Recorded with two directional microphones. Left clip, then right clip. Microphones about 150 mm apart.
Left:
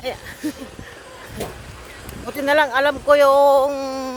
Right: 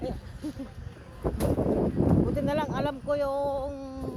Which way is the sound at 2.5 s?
35° left (ahead or behind).